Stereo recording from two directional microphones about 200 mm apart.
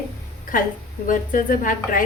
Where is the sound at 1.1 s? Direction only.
45° left (ahead or behind).